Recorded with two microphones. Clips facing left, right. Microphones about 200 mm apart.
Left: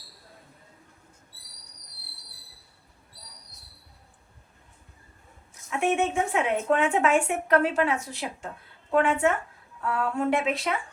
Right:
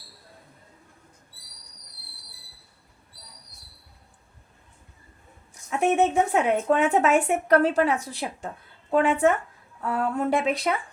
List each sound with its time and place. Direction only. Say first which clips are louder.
5.8 s speech: right 4 dB; 40° right (ahead or behind)